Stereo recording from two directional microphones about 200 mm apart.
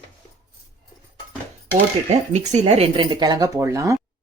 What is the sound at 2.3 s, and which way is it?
Speech, 35° right (ahead or behind).